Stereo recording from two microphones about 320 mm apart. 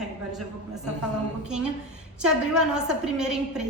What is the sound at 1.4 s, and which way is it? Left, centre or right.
A woman's voice, centre.